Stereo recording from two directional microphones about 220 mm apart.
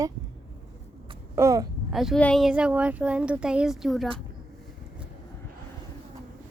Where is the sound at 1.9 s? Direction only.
Centre (ahead or behind).